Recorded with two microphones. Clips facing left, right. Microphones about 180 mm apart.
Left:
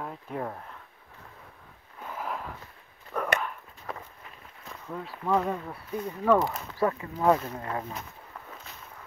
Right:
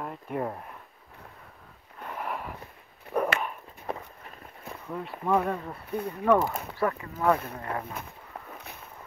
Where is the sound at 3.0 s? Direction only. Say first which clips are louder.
Right 2 dB; 20° right (ahead or behind).